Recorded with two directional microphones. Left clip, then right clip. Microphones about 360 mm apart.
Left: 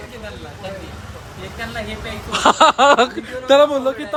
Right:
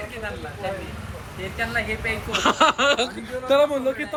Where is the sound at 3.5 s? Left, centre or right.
Left.